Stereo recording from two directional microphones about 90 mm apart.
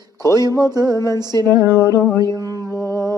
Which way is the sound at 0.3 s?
45° right (ahead or behind).